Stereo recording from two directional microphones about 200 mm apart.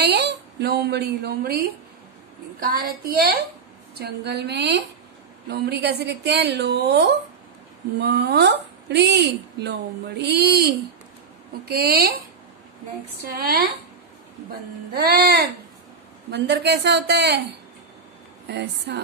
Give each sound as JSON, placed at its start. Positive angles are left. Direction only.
{"t": 0.0, "sound": "speech", "side_deg": -55}
{"t": 2.6, "sound": "child singing", "side_deg": -45}
{"t": 3.9, "sound": "speech", "side_deg": -55}
{"t": 11.6, "sound": "child singing", "side_deg": -50}
{"t": 13.4, "sound": "child singing", "side_deg": -50}
{"t": 14.9, "sound": "child singing", "side_deg": -55}
{"t": 16.3, "sound": "speech", "side_deg": -55}
{"t": 18.5, "sound": "speech", "side_deg": -60}